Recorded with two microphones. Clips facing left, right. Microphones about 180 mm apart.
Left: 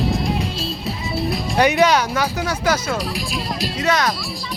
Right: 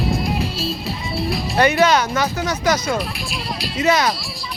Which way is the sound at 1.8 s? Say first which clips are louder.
Even; 10° left (ahead or behind).